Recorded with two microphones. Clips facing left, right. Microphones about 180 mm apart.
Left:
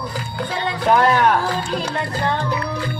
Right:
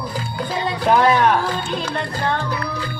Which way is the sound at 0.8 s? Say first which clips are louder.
Even; centre (ahead or behind).